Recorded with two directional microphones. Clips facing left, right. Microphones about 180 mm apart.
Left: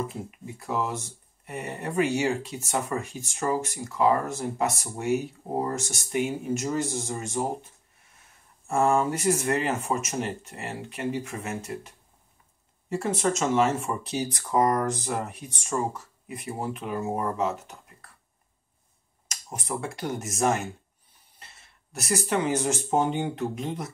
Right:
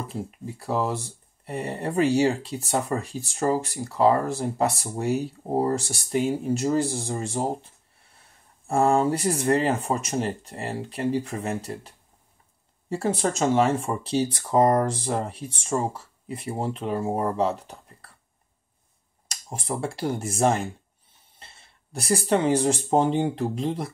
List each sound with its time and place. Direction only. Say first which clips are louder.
0.3 s speech: right 4 dB; 35° right (ahead or behind)
12.9 s speech: right 1 dB; 35° right (ahead or behind)
19.2 s speech: right 3 dB; 30° right (ahead or behind)